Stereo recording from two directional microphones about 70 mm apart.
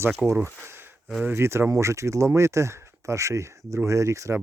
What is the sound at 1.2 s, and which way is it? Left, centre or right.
Speech, right.